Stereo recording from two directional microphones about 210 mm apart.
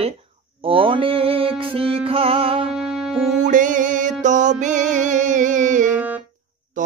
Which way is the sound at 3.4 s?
35° right (ahead or behind).